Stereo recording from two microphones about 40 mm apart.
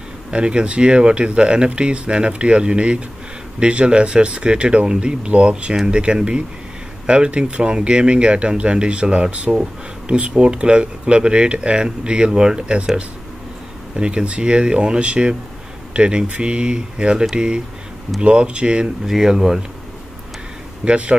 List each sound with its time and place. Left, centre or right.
0.3 s speech: right
19.0 s speech: centre
20.8 s speech: right